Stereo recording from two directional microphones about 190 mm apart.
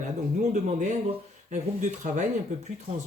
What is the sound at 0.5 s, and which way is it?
Speech, 40° right (ahead or behind).